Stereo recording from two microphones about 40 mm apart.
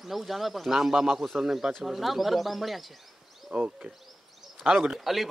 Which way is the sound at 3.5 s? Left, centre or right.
Right.